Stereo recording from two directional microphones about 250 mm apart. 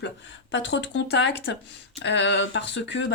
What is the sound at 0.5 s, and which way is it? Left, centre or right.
Speech, left.